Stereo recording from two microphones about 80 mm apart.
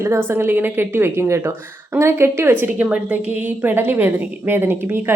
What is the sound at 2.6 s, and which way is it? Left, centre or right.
A woman's voice, centre.